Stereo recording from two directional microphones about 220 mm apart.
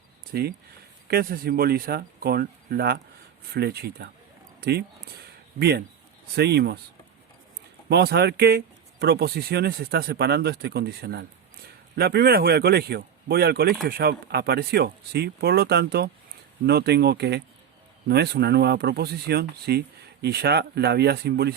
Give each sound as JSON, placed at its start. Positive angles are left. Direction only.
{"t": 0.3, "sound": "speech", "side_deg": -45}
{"t": 7.9, "sound": "speech", "side_deg": -45}